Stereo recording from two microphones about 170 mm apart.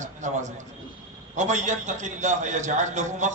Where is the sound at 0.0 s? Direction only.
45° right (ahead or behind).